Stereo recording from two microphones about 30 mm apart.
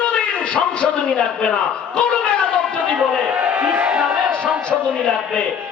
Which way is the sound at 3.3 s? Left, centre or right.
Right.